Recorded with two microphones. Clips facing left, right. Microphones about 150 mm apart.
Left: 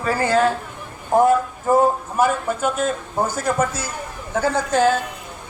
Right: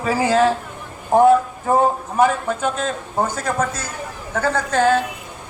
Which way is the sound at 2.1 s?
5° left (ahead or behind).